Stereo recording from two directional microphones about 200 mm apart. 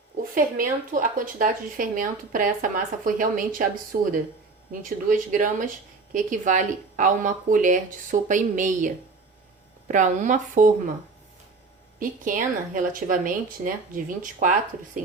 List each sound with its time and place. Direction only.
0.2 s a woman's voice: 45° right (ahead or behind)
9.9 s speech: 40° right (ahead or behind)
11.9 s speech: 40° right (ahead or behind)